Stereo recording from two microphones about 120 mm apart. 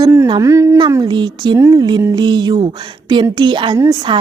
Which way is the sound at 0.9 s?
35° right (ahead or behind).